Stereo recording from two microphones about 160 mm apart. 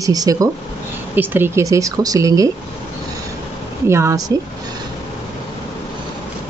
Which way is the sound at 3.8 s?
20° right (ahead or behind).